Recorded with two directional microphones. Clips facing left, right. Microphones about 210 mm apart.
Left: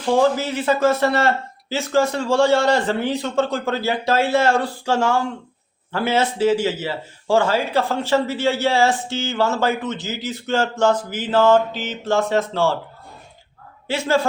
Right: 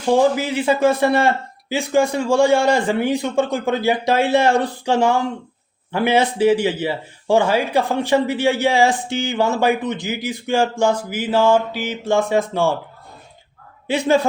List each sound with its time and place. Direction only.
0.1 s speech: 15° right (ahead or behind)
13.8 s speech: 15° right (ahead or behind)